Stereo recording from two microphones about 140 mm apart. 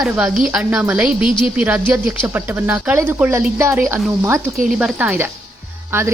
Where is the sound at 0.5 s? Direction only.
5° right (ahead or behind).